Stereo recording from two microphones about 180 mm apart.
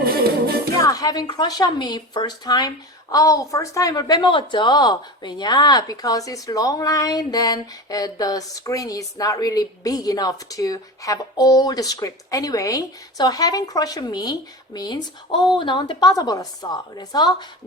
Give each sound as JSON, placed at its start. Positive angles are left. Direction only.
{"t": 0.0, "sound": "music", "side_deg": -60}
{"t": 0.8, "sound": "a woman's voice", "side_deg": 20}